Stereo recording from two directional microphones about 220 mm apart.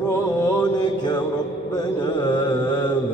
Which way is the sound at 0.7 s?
20° left (ahead or behind).